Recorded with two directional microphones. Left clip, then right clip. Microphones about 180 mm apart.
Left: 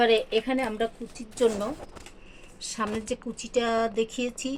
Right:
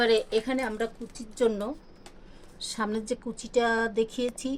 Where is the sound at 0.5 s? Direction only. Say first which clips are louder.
Left 2 dB; 10° right (ahead or behind).